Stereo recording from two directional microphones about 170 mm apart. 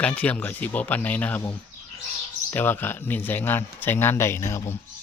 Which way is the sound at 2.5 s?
10° left (ahead or behind).